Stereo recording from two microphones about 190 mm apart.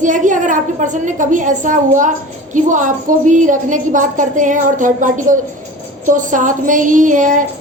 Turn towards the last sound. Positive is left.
turn(degrees=-45)  # may be behind; listen again after turning